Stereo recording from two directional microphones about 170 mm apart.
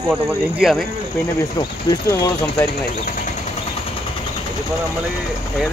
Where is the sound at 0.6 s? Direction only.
Centre (ahead or behind).